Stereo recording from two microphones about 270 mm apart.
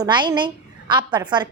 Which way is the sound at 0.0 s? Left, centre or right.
Centre.